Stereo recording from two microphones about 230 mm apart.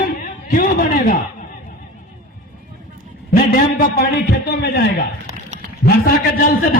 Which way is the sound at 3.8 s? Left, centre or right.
Left.